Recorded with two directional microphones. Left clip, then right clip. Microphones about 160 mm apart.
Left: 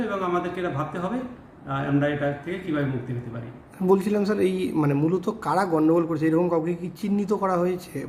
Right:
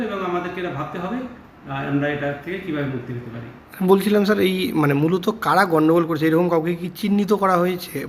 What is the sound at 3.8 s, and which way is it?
Speech, centre (ahead or behind).